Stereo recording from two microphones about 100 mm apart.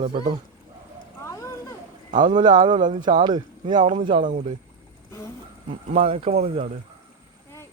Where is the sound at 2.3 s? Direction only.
50° right (ahead or behind).